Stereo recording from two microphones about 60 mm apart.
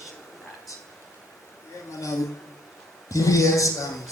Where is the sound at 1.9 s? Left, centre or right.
Left.